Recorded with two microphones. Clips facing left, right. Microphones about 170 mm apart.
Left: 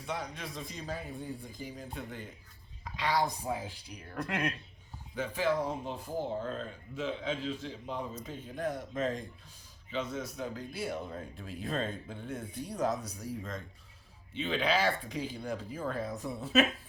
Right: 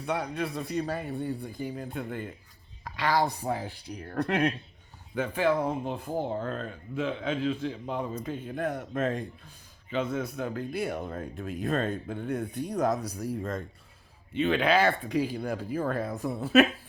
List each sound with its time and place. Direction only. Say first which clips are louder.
0.0 s speech: right 8 dB; 60° right (ahead or behind)
14.3 s speech: right 6 dB; 60° right (ahead or behind)